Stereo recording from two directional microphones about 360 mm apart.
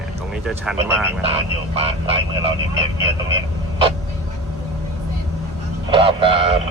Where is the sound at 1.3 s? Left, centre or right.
Centre.